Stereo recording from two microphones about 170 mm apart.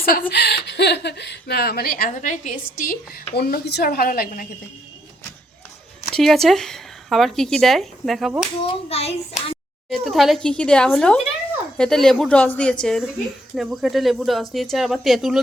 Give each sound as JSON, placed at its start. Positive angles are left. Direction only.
{"t": 0.0, "sound": "speech", "side_deg": 60}
{"t": 6.1, "sound": "speech", "side_deg": 0}
{"t": 8.6, "sound": "a child's voice", "side_deg": 35}
{"t": 9.9, "sound": "a woman's voice", "side_deg": 0}